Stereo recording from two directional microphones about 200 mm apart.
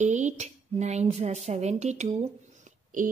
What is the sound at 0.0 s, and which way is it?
Speech, 35° right (ahead or behind).